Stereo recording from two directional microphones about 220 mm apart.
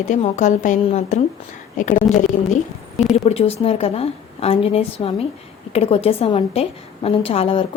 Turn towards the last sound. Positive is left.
turn(degrees=25)  # may be behind; listen again after turning